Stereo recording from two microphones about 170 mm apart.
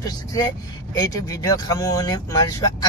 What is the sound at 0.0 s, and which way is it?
Speech, 20° left (ahead or behind).